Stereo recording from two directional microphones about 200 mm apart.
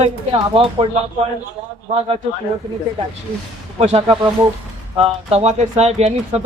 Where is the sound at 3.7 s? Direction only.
30° right (ahead or behind).